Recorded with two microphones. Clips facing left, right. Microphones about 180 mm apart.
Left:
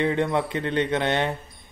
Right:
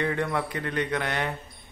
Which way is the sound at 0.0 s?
20° left (ahead or behind).